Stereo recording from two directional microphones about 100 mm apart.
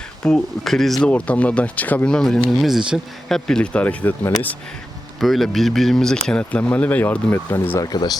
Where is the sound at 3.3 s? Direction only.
5° left (ahead or behind).